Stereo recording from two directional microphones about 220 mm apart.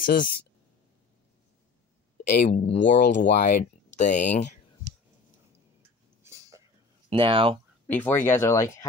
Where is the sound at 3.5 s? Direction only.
35° left (ahead or behind).